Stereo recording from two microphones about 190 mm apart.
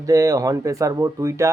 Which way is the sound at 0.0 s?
20° right (ahead or behind).